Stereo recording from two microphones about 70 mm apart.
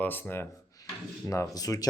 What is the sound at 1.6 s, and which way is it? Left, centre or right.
Speech, left.